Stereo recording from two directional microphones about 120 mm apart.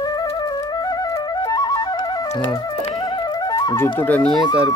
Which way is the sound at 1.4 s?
35° left (ahead or behind).